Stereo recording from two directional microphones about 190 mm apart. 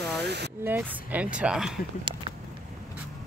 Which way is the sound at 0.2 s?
60° right (ahead or behind).